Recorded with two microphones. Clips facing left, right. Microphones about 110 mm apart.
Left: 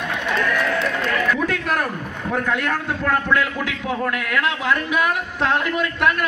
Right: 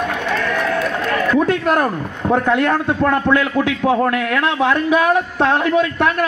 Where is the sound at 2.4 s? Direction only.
30° right (ahead or behind).